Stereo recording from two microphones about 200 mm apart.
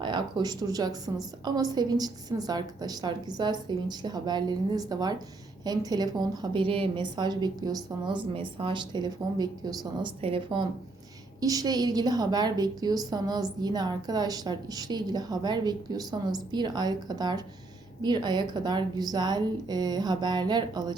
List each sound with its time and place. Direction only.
0.0 s a woman's voice: 20° right (ahead or behind)